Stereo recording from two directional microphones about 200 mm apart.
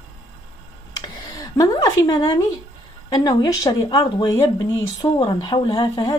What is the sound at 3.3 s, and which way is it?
Speech, 20° left (ahead or behind).